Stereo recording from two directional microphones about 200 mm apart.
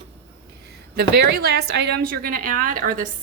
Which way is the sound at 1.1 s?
55° right (ahead or behind).